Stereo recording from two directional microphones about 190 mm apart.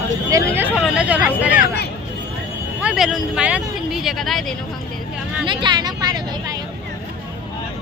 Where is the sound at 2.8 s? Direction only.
Centre (ahead or behind).